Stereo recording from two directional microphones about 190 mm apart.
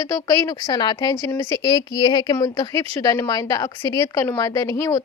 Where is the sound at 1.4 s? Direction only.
25° right (ahead or behind).